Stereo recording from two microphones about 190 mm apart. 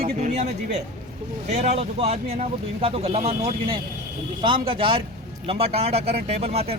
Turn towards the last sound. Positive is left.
turn(degrees=-35)  # may be behind; listen again after turning